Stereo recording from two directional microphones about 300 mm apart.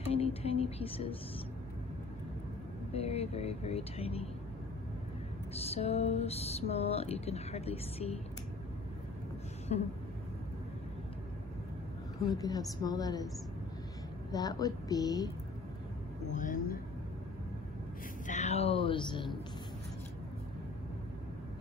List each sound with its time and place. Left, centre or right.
0.1 s speech: centre
2.9 s speech: centre
5.5 s speech: centre
9.7 s speech: left
12.3 s a woman's voice: centre
14.3 s a woman's voice: centre
16.3 s speech: left
18.2 s a sound: left